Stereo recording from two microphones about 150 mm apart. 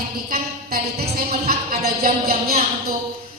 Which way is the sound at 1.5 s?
80° right.